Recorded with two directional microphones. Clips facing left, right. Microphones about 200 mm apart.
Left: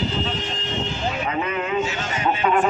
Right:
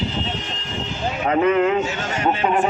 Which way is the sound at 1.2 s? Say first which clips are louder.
Right 13 dB; 55° right (ahead or behind).